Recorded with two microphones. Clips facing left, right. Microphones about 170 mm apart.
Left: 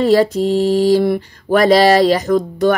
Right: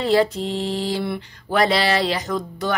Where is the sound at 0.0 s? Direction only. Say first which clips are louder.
Left 6 dB; 40° left (ahead or behind).